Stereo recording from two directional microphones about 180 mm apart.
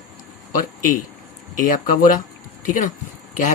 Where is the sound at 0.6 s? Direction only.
50° left (ahead or behind).